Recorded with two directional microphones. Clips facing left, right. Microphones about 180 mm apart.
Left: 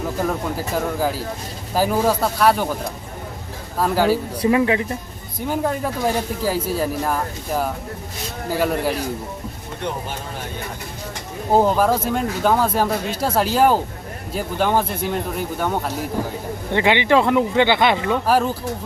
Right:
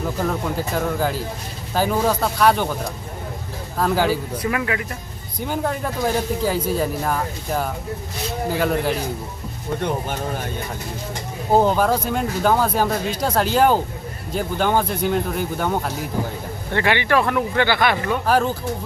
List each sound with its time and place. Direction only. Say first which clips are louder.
0.2 s speech: even; 5° left (ahead or behind)
3.8 s speech: left 2 dB; 5° left (ahead or behind)
4.4 s speech: left 6 dB; 25° left (ahead or behind)
5.5 s speech: left 2 dB; centre (ahead or behind)
11.5 s speech: even; centre (ahead or behind)
16.7 s speech: left 3 dB; 20° left (ahead or behind)
18.3 s speech: even; 5° left (ahead or behind)